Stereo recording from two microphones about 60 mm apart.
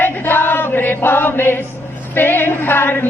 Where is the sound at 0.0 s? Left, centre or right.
Left.